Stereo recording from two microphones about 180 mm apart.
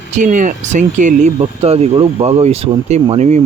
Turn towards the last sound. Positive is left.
turn(degrees=-35)  # may be behind; listen again after turning